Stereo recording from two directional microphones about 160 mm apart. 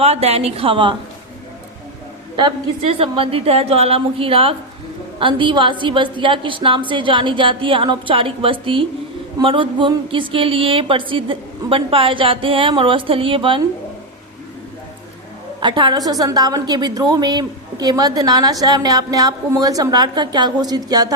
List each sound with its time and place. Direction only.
0.0 s speech: 40° right (ahead or behind)
2.3 s speech: 35° right (ahead or behind)
15.6 s a woman's voice: 30° right (ahead or behind)